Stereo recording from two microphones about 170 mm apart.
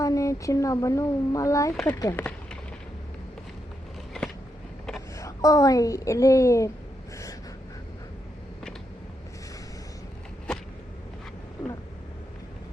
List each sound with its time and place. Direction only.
0.0 s speech: 20° left (ahead or behind)
5.1 s a woman's voice: 20° left (ahead or behind)